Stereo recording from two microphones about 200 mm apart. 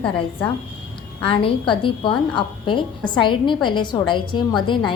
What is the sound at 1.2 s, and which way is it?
A woman's voice, 25° left (ahead or behind).